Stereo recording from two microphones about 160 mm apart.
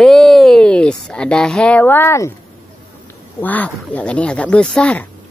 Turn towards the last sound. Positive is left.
turn(degrees=5)  # may be behind; listen again after turning